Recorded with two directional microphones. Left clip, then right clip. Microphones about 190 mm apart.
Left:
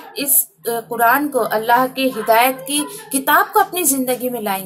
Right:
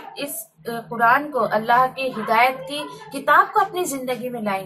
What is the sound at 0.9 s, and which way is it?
A woman's voice, 45° left (ahead or behind).